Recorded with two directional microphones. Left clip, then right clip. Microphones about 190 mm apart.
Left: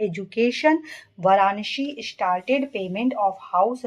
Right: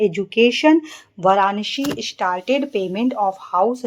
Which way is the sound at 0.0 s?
25° right (ahead or behind).